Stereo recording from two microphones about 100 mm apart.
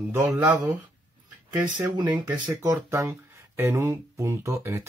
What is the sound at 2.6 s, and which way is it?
Speech, 30° right (ahead or behind).